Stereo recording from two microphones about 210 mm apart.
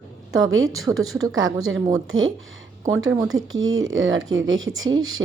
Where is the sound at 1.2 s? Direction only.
70° right (ahead or behind).